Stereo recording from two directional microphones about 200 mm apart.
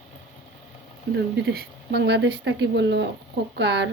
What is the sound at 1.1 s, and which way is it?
Speech, 60° right (ahead or behind).